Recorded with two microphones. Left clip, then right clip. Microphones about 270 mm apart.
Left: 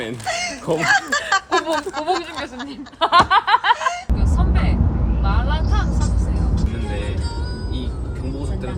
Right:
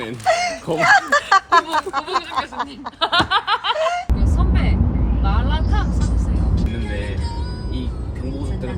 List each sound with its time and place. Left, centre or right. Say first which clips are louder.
0.0 s a sound: right 5 dB; centre
3.0 s snicker: left 4 dB; left
3.8 s snicker: right 3 dB; centre